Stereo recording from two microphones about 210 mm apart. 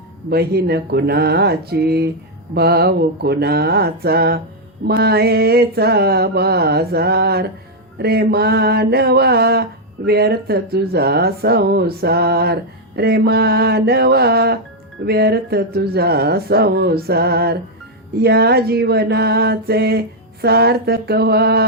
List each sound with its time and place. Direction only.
0.3 s mantra: 50° right (ahead or behind)